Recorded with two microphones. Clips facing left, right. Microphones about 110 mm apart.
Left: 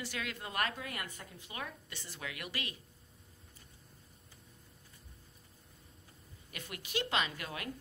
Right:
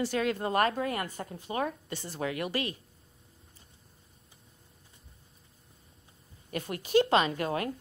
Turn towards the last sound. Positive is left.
turn(degrees=-40)  # may be behind; listen again after turning